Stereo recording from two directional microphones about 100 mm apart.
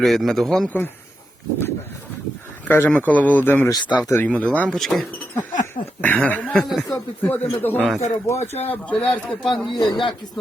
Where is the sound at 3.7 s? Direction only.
50° left (ahead or behind).